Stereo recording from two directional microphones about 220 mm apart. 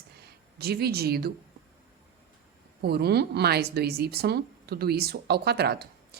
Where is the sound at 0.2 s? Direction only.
45° right (ahead or behind).